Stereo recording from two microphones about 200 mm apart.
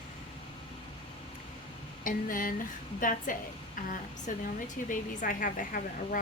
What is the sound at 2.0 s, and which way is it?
A woman's voice, 45° left (ahead or behind).